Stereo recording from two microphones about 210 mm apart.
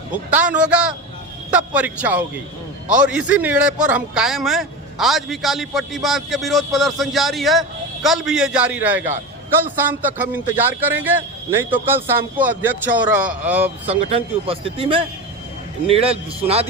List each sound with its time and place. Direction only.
0.1 s a man's voice: 5° right (ahead or behind)
13.8 s a man's voice: 30° right (ahead or behind)